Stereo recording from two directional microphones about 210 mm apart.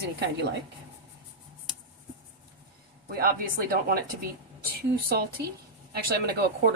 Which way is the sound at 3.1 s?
45° right (ahead or behind).